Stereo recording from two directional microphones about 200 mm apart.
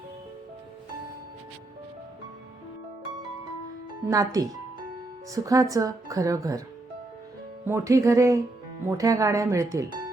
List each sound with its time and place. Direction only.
4.0 s speech: 15° right (ahead or behind)
7.6 s speech: 15° right (ahead or behind)